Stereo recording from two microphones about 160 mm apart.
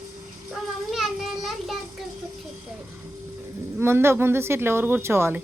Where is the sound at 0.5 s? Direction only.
Centre (ahead or behind).